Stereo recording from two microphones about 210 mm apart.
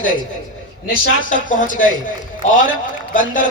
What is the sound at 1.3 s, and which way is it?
Speech, 40° left (ahead or behind).